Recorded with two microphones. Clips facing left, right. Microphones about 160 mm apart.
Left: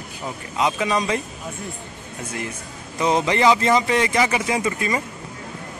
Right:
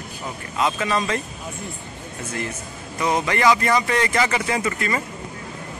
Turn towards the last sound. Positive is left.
turn(degrees=15)  # may be behind; listen again after turning